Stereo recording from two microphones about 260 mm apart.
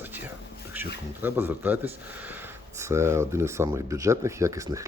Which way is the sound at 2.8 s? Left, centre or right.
Centre.